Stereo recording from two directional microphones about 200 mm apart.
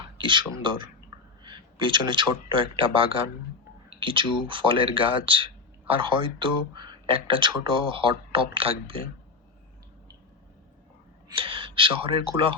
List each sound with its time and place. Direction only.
0.2 s a man's voice: 25° right (ahead or behind)
11.3 s speech: 25° right (ahead or behind)